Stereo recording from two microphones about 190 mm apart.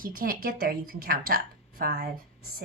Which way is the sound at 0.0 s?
50° right (ahead or behind).